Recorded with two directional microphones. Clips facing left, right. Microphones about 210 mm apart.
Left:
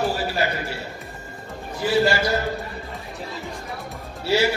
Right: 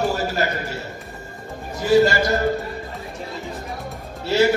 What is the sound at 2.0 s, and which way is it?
Speech, 45° right (ahead or behind).